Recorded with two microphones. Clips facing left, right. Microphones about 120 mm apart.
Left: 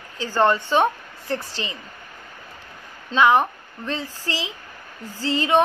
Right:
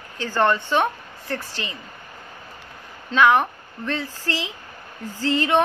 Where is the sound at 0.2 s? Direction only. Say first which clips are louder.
Left 1 dB; 15° left (ahead or behind).